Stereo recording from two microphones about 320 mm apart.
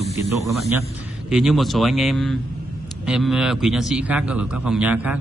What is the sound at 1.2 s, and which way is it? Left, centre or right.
A man's voice, centre.